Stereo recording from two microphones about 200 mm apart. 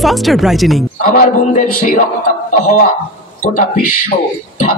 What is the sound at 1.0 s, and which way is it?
A man's voice, 40° left (ahead or behind).